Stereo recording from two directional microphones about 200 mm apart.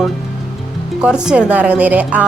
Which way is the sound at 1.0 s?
5° right (ahead or behind).